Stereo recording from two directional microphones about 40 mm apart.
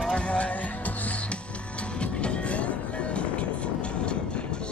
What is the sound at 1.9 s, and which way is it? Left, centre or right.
Music, left.